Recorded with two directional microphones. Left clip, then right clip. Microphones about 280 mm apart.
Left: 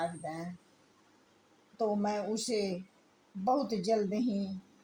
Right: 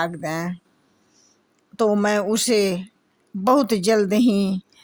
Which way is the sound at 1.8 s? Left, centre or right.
Right.